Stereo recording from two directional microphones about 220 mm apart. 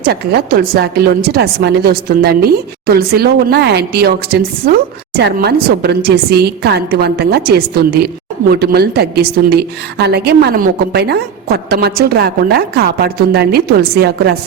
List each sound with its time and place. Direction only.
0.0 s a woman's voice: 45° right (ahead or behind)